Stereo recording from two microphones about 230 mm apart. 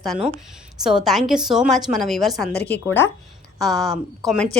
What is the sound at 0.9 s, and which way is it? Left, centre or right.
A woman's voice, centre.